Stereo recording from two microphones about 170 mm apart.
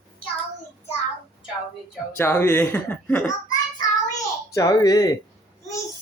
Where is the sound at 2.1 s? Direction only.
15° left (ahead or behind).